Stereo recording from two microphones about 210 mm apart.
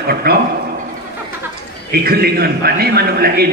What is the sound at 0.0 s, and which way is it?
Speech, 45° right (ahead or behind).